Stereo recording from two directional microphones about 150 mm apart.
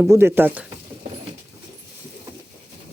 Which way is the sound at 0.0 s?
15° right (ahead or behind).